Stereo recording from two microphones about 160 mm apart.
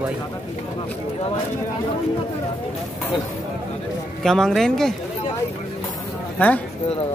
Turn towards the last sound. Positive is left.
turn(degrees=10)  # may be behind; listen again after turning